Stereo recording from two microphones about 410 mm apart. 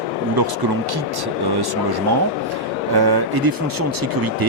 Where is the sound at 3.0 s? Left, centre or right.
Right.